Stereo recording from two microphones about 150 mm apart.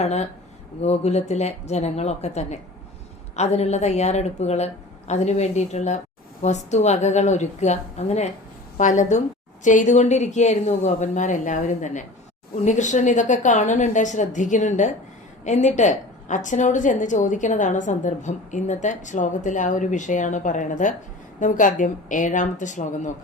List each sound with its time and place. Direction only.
0.0 s a woman's voice: 45° left (ahead or behind)